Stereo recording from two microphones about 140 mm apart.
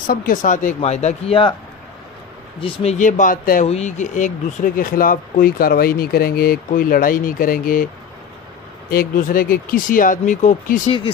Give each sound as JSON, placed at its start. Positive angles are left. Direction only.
{"t": 0.0, "sound": "speech", "side_deg": 80}
{"t": 0.7, "sound": "a man's voice", "side_deg": 50}
{"t": 2.6, "sound": "speech", "side_deg": 45}
{"t": 3.6, "sound": "speech", "side_deg": 50}
{"t": 8.9, "sound": "speech", "side_deg": 90}